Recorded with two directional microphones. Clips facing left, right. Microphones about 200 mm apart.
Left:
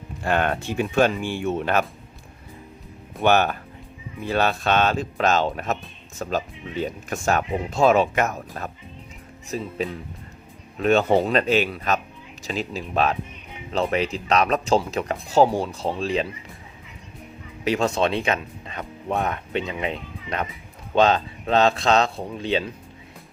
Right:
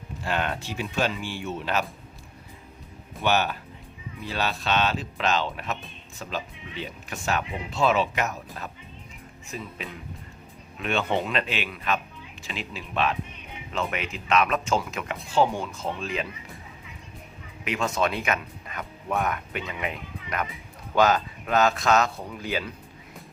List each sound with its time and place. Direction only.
0.2 s speech: 55° left (ahead or behind)
3.2 s speech: 50° left (ahead or behind)
9.5 s speech: 35° left (ahead or behind)
17.7 s speech: 35° left (ahead or behind)